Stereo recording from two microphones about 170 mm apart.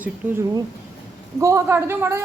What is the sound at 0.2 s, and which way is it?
Speech, 10° right (ahead or behind).